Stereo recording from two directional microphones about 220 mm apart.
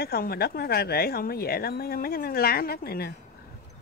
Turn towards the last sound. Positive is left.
turn(degrees=45)  # may be behind; listen again after turning